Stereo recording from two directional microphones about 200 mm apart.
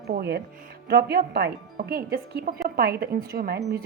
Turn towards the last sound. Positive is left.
turn(degrees=-50)  # may be behind; listen again after turning